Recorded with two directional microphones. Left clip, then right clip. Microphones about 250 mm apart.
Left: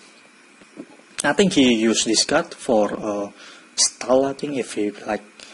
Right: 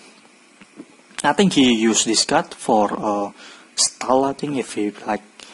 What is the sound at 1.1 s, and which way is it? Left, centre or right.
Speech, centre.